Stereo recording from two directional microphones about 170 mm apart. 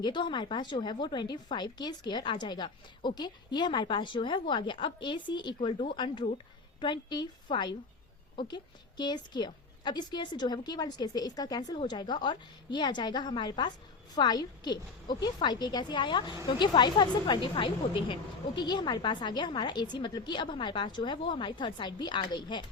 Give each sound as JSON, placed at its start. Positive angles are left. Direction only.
{"t": 0.0, "sound": "a woman's voice", "side_deg": 25}